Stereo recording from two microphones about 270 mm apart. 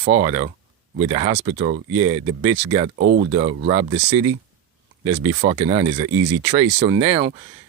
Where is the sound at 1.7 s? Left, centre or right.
Right.